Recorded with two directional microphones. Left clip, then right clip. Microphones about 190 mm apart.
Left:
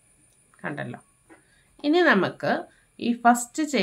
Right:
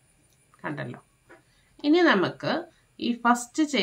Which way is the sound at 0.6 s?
30° left (ahead or behind).